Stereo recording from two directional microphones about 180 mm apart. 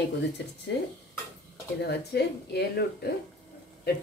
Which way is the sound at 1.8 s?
65° left (ahead or behind).